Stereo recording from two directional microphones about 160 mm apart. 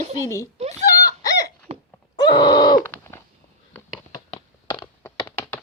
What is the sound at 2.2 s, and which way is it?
Groan, 25° left (ahead or behind).